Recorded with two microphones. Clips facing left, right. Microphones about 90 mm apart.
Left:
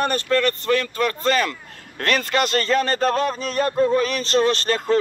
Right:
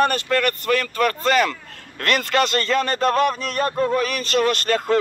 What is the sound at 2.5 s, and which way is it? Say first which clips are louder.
A man's voice: left 1 dB; 30° left (ahead or behind).